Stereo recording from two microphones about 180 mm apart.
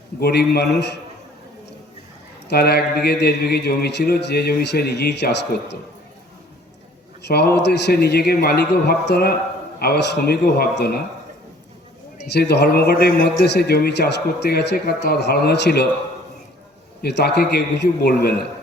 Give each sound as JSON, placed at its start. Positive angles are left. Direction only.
{"t": 0.2, "sound": "a man's voice", "side_deg": 60}
{"t": 2.5, "sound": "a man's voice", "side_deg": 65}
{"t": 7.3, "sound": "a man's voice", "side_deg": 65}
{"t": 12.3, "sound": "a man's voice", "side_deg": 70}
{"t": 17.0, "sound": "a man's voice", "side_deg": 65}